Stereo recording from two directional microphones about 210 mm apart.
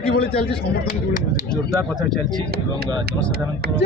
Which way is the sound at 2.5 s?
50° right (ahead or behind).